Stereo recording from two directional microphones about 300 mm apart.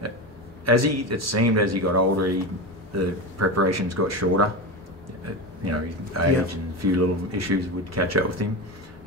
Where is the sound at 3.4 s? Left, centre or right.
Right.